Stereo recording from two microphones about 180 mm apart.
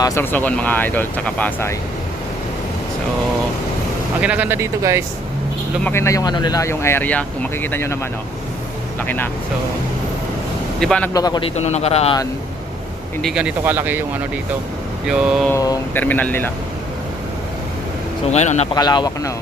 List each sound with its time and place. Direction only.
0.0 s speech: 15° left (ahead or behind)
4.2 s speech: 10° right (ahead or behind)
5.8 s speech: 15° left (ahead or behind)
9.0 s speech: 10° left (ahead or behind)
10.8 s a man's voice: 5° left (ahead or behind)
11.1 s a man's voice: 20° left (ahead or behind)
13.2 s speech: 5° right (ahead or behind)
15.0 s speech: 5° right (ahead or behind)
15.4 s speech: 20° left (ahead or behind)
18.3 s a man's voice: 40° left (ahead or behind)
18.7 s speech: 20° left (ahead or behind)